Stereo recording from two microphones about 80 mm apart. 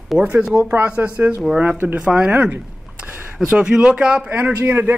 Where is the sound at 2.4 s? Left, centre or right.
Centre.